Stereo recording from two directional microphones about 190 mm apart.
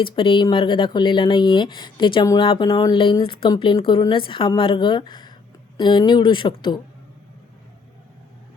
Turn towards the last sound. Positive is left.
turn(degrees=25)  # may be behind; listen again after turning